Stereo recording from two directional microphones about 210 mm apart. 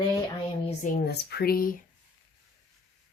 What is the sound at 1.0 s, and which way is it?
Speech, 50° left (ahead or behind).